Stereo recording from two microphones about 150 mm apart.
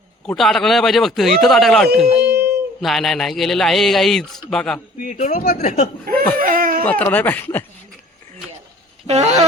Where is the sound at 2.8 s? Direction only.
Centre (ahead or behind).